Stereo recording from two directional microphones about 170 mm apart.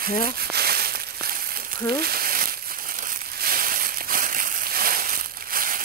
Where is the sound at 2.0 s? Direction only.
60° right (ahead or behind).